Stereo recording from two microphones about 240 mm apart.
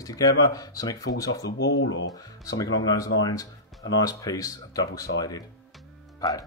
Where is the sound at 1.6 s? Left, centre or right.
Left.